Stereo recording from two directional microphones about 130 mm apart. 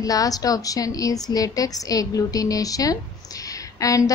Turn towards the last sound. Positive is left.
turn(degrees=25)  # may be behind; listen again after turning